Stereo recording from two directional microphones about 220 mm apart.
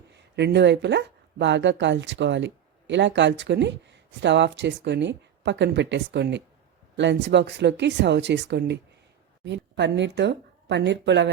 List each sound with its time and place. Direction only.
0.2 s speech: 50° right (ahead or behind)